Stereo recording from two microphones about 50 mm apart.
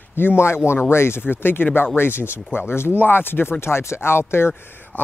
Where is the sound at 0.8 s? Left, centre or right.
Left.